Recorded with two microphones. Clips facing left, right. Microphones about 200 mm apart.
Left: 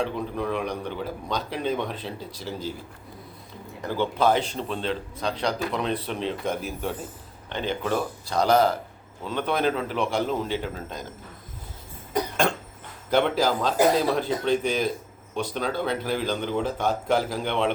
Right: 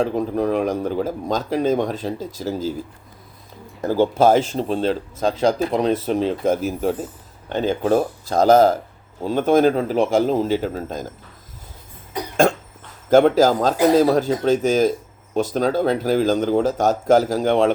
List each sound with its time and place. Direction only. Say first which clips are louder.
0.0 s speech: right 8 dB; 40° right (ahead or behind)
3.8 s a man's voice: right 8 dB; 45° right (ahead or behind)
13.1 s speech: right 9 dB; 45° right (ahead or behind)